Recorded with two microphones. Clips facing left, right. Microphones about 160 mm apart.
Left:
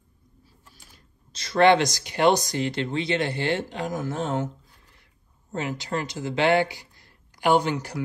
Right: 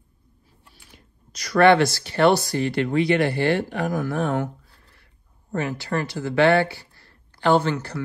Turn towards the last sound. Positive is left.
turn(degrees=15)  # may be behind; listen again after turning